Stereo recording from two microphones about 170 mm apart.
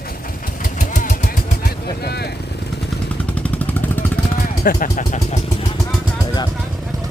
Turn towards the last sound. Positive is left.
turn(degrees=45)  # may be behind; listen again after turning